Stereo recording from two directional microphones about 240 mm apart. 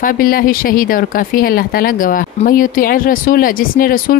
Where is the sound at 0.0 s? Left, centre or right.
Left.